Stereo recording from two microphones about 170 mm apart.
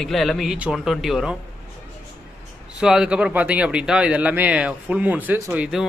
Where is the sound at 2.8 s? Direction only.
5° right (ahead or behind).